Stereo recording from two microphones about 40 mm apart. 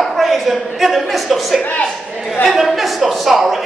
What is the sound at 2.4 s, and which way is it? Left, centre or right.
A woman's voice, centre.